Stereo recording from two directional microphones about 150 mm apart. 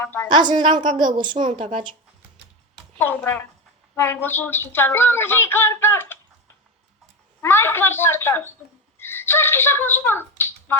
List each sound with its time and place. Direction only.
0.0 s speech: 15° left (ahead or behind)
0.3 s a woman's voice: 30° right (ahead or behind)
3.0 s speech: 15° left (ahead or behind)
7.4 s speech: 15° left (ahead or behind)